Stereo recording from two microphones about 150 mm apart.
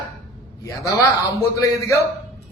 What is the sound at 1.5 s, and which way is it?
Speech, 20° left (ahead or behind).